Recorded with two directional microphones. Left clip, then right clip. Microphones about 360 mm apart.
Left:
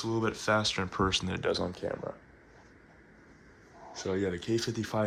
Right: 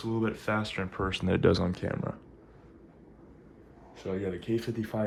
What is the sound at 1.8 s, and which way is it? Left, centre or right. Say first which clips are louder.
Speech: even; right.